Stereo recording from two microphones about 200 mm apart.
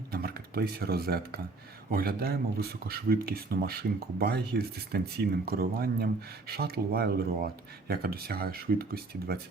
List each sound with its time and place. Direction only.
0.1 s speech: 50° right (ahead or behind)